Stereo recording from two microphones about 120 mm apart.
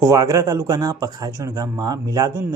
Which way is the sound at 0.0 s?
30° right (ahead or behind).